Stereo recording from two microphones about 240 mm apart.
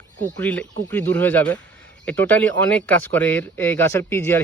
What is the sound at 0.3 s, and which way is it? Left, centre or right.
Speech, centre.